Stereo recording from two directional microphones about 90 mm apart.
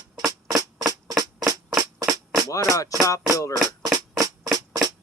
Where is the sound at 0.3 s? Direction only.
45° right (ahead or behind).